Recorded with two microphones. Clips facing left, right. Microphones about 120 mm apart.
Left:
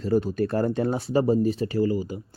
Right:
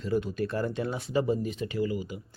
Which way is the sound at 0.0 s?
40° left (ahead or behind).